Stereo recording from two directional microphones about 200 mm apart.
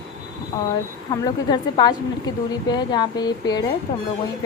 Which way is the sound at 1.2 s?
20° left (ahead or behind).